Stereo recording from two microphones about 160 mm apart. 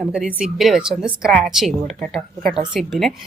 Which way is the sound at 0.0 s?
5° right (ahead or behind).